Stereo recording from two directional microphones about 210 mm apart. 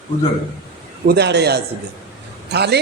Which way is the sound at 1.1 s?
50° right (ahead or behind).